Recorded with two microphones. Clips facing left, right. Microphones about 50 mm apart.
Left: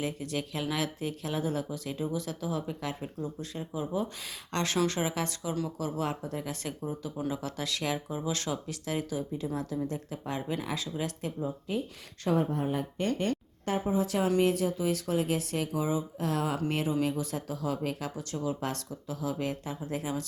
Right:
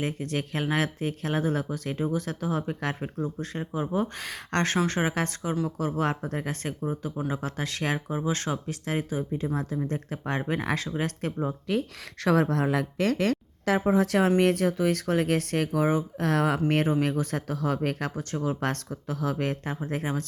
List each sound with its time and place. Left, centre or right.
0.0 s speech: right